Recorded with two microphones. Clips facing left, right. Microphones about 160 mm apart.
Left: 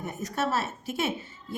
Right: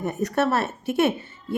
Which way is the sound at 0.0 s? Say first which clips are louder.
Right 7 dB; 65° right (ahead or behind).